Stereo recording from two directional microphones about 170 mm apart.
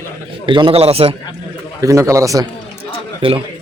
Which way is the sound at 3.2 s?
30° right (ahead or behind).